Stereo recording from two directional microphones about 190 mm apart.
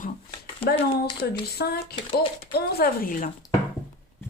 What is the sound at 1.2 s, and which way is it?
A woman's voice, 60° left (ahead or behind).